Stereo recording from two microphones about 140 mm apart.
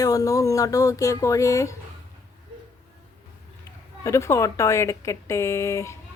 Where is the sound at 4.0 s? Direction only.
20° left (ahead or behind).